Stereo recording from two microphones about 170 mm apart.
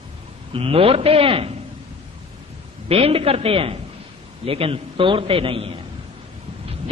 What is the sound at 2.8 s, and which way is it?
A man's voice, 35° right (ahead or behind).